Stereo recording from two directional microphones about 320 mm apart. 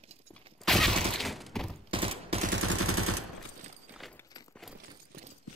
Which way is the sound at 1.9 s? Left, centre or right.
Centre.